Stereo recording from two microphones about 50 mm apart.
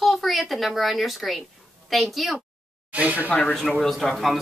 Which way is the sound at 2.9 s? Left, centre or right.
Right.